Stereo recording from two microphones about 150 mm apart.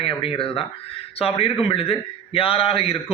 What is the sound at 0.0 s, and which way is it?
A man's voice, 35° left (ahead or behind).